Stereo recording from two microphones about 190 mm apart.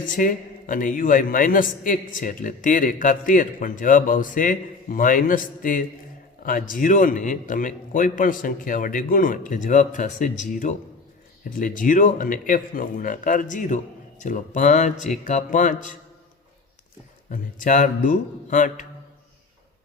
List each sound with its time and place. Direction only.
0.0 s a man's voice: 45° left (ahead or behind)
17.2 s a man's voice: 45° left (ahead or behind)